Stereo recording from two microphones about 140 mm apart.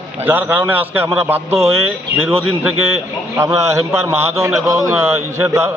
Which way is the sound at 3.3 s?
20° right (ahead or behind).